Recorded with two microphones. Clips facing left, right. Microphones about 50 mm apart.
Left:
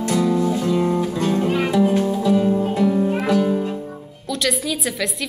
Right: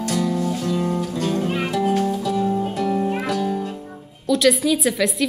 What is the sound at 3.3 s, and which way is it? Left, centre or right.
Music, left.